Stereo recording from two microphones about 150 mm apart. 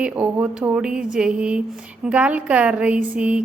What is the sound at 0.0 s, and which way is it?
A woman's voice, 10° right (ahead or behind).